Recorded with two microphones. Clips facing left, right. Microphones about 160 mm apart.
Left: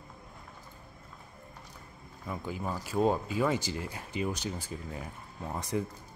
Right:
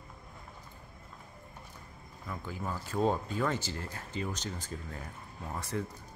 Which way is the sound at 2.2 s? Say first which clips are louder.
Left 3 dB; 15° left (ahead or behind).